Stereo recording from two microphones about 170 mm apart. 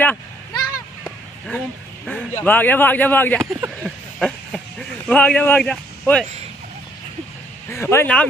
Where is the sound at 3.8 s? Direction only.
Centre (ahead or behind).